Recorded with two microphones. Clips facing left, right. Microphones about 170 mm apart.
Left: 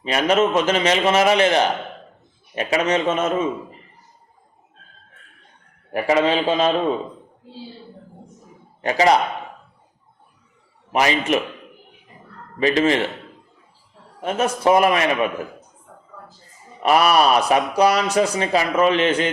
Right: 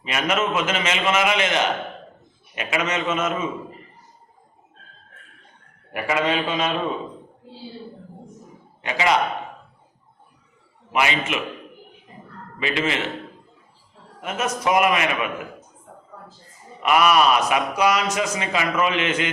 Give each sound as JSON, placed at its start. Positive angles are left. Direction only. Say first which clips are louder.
{"t": 0.0, "sound": "a man's voice", "louder": "left 6 dB", "side_deg": 35}
{"t": 5.9, "sound": "a man's voice", "louder": "left 5 dB", "side_deg": 35}
{"t": 8.8, "sound": "a man's voice", "louder": "left 5 dB", "side_deg": 40}
{"t": 10.9, "sound": "a man's voice", "louder": "left 4 dB", "side_deg": 40}
{"t": 12.5, "sound": "a man's voice", "louder": "left 7 dB", "side_deg": 40}
{"t": 14.2, "sound": "a man's voice", "louder": "left 4 dB", "side_deg": 30}
{"t": 16.8, "sound": "a man's voice", "louder": "left 2 dB", "side_deg": 35}